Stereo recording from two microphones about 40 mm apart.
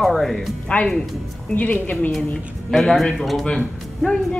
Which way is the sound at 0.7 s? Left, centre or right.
Left.